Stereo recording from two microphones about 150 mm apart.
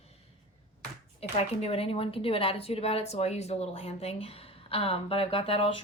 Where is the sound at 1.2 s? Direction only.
45° left (ahead or behind).